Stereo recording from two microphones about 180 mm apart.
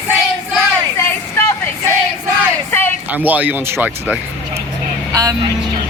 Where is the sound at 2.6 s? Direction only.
10° left (ahead or behind).